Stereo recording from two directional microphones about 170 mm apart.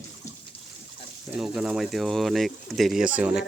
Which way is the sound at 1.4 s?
5° right (ahead or behind).